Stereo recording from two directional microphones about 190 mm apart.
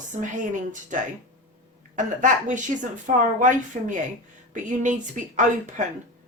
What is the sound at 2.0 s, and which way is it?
Speech, 40° right (ahead or behind).